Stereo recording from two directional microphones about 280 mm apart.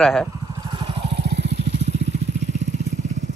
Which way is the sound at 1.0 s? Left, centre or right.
Right.